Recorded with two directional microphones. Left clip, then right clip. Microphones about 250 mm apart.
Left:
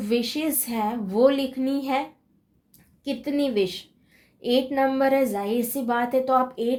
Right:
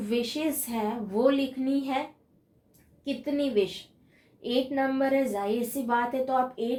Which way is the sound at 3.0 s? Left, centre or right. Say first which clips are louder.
Left 4 dB; left.